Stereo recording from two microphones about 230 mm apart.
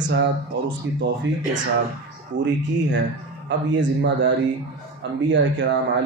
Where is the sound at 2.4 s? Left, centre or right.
Right.